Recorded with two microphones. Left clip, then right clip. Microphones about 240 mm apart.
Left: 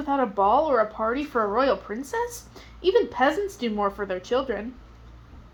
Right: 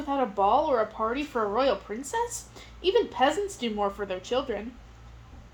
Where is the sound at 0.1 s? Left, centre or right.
Left.